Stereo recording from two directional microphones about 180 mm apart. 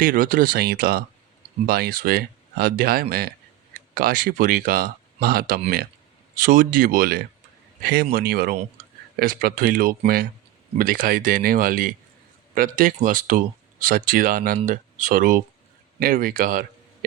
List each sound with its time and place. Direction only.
0.0 s a man's voice: 50° right (ahead or behind)